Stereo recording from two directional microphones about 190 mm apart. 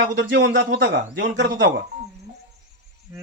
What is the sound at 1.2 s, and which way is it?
Speech, 70° right (ahead or behind).